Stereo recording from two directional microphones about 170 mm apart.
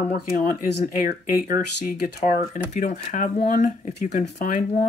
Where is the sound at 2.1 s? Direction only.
50° left (ahead or behind).